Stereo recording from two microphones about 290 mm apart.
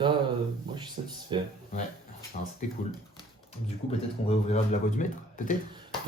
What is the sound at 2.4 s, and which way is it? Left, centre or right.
Speech, left.